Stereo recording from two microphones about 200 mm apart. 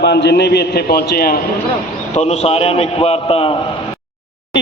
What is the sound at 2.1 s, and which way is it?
A man's voice, 35° left (ahead or behind).